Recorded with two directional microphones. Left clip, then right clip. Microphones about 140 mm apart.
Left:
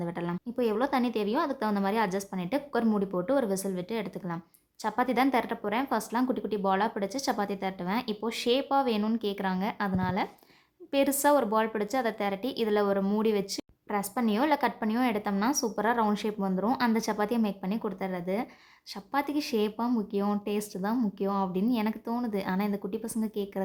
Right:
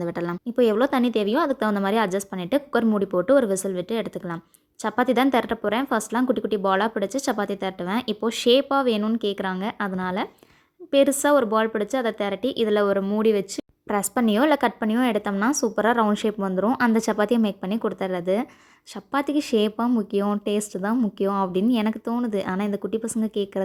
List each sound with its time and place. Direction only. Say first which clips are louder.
0.0 s a woman's voice: right 7 dB; 35° right (ahead or behind)
13.8 s a woman's voice: right 7 dB; 40° right (ahead or behind)